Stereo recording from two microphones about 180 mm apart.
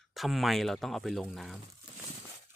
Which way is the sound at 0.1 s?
Centre (ahead or behind).